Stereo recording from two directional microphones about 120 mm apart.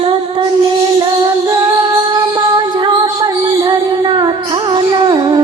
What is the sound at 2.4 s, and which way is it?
Music, 35° right (ahead or behind).